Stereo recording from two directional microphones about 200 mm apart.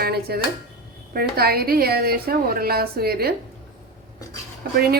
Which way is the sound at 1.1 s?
50° right (ahead or behind).